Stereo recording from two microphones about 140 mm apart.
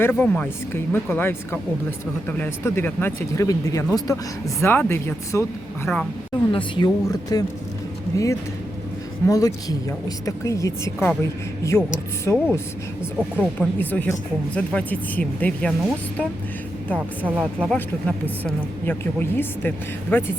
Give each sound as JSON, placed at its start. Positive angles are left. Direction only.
{"t": 0.0, "sound": "a woman's voice", "side_deg": 15}
{"t": 6.5, "sound": "a woman's voice", "side_deg": 35}
{"t": 13.1, "sound": "speech", "side_deg": -10}
{"t": 13.6, "sound": "a woman's voice", "side_deg": 15}
{"t": 17.2, "sound": "speech", "side_deg": -10}
{"t": 17.7, "sound": "a woman's voice", "side_deg": 10}